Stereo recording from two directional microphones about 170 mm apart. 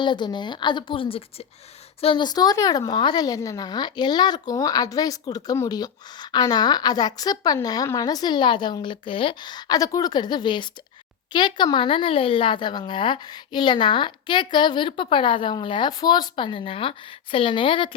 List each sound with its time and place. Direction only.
0.0 s a woman's voice: 25° left (ahead or behind)